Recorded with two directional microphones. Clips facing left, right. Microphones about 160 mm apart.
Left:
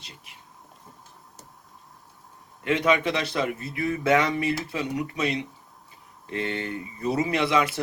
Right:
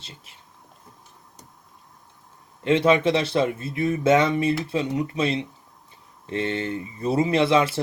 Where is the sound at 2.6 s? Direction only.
30° right (ahead or behind).